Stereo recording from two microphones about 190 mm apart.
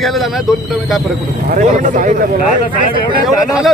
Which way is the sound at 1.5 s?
40° right (ahead or behind).